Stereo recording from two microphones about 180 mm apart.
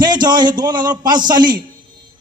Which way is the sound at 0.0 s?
25° right (ahead or behind).